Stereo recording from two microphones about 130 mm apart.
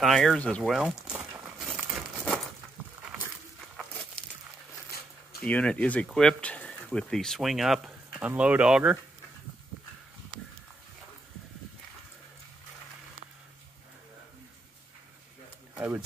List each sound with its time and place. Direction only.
0.0 s speech: centre (ahead or behind)
1.1 s walk: 20° right (ahead or behind)
1.6 s crumpling: 5° right (ahead or behind)
3.7 s crumpling: centre (ahead or behind)
5.4 s speech: 10° left (ahead or behind); by 8.9 s 5° right (ahead or behind)
15.7 s a sound: 10° right (ahead or behind)